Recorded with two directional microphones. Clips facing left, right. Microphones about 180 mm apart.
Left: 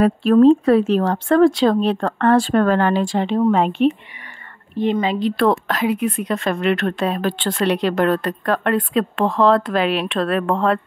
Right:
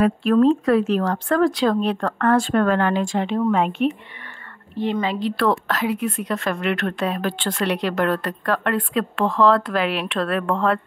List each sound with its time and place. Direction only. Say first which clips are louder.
0.0 s a woman's voice: left 4 dB; 30° left (ahead or behind)
5.0 s a woman's voice: left 3 dB; 20° left (ahead or behind)